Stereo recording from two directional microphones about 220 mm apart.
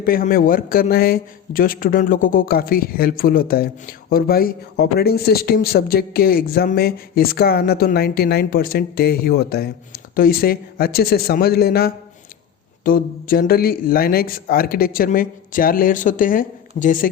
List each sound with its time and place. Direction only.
0.0 s a man's voice: 40° left (ahead or behind)